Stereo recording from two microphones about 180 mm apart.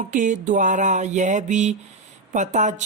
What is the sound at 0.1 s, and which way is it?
Speech, 45° right (ahead or behind).